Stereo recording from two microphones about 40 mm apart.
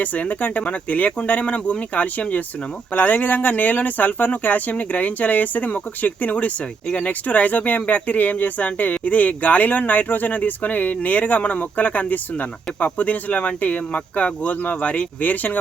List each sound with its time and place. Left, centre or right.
0.0 s speech: left